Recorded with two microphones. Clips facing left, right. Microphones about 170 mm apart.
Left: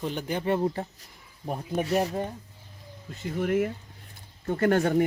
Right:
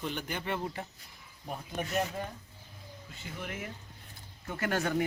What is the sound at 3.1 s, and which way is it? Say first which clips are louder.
Speech: left 15 dB; 50° left (ahead or behind).